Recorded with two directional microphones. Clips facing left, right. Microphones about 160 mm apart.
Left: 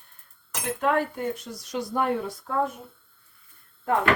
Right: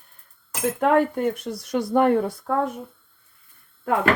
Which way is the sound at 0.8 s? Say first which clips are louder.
Right 5 dB; 60° right (ahead or behind).